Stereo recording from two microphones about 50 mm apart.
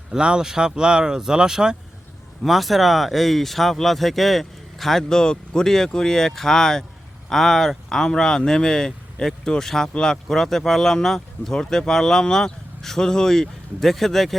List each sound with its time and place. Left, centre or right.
0.1 s speech: centre
2.5 s speech: centre